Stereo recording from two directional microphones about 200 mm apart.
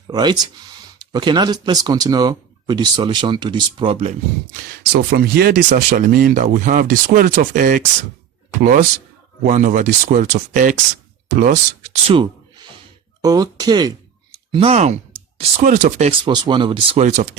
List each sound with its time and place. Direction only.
0.1 s speech: 20° right (ahead or behind)
4.9 s speech: 50° right (ahead or behind)
12.0 s a sound: 25° right (ahead or behind)
13.2 s speech: 20° right (ahead or behind); by 16.1 s 35° right (ahead or behind)
16.2 s speech: 25° right (ahead or behind); by 17.3 s 40° right (ahead or behind)